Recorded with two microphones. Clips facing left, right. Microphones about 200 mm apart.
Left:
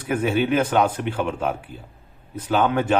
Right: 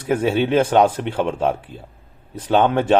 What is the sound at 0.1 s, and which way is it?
A man's voice, 25° right (ahead or behind).